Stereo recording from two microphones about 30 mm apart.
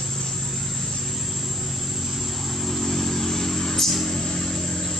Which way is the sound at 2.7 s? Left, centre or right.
Centre.